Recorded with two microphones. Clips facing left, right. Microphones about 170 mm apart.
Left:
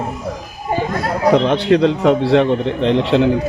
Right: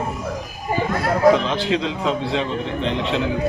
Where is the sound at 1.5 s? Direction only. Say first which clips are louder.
Left 8 dB; 60° left (ahead or behind).